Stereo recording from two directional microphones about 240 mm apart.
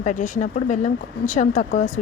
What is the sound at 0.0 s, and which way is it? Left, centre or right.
A woman's voice, left.